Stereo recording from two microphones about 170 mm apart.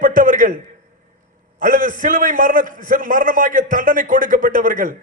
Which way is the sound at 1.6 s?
50° right (ahead or behind).